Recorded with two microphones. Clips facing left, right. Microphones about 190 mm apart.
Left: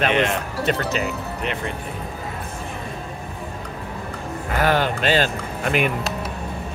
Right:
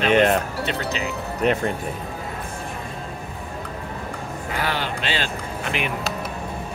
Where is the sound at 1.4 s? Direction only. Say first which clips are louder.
Right 10 dB; 40° right (ahead or behind).